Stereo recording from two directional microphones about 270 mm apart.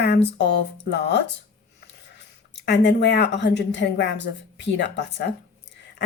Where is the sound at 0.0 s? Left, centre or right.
Left.